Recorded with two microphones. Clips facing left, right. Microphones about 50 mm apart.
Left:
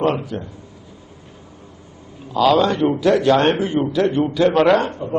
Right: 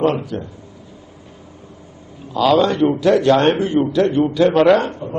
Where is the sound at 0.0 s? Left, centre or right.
Centre.